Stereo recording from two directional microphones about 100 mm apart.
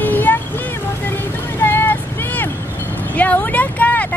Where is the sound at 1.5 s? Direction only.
20° left (ahead or behind).